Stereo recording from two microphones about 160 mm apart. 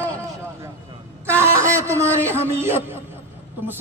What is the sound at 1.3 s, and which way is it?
A man's voice, 15° right (ahead or behind).